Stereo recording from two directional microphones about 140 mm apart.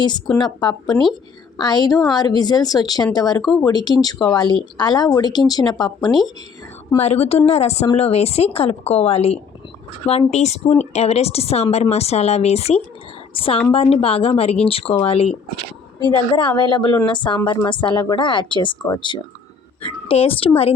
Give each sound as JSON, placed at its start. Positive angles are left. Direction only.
{"t": 0.0, "sound": "a woman's voice", "side_deg": 30}
{"t": 6.9, "sound": "a woman's voice", "side_deg": 50}
{"t": 16.0, "sound": "a woman's voice", "side_deg": 30}